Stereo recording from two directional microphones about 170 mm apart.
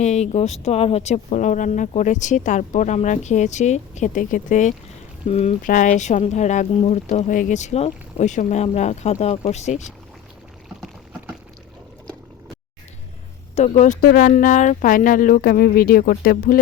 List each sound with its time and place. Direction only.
0.0 s speech: 40° left (ahead or behind)
13.6 s speech: 45° left (ahead or behind)